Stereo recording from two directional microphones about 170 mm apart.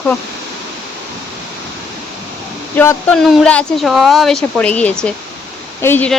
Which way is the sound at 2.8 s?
15° left (ahead or behind).